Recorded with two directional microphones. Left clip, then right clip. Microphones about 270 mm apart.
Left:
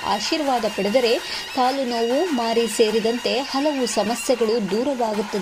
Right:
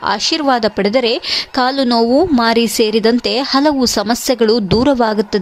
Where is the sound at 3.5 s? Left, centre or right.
Right.